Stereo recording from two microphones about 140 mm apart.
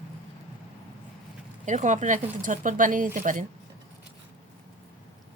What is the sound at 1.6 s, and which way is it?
Speech, 60° right (ahead or behind).